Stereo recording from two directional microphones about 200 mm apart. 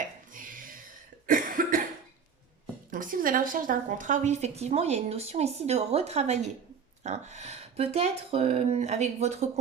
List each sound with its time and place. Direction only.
0.3 s cough: 45° right (ahead or behind)
2.9 s a woman's voice: 45° right (ahead or behind)